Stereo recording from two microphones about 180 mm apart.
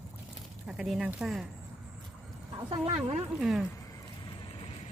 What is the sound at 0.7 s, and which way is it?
Speech, 5° right (ahead or behind).